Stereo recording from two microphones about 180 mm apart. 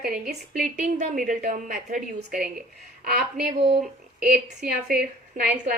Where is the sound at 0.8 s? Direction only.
45° right (ahead or behind).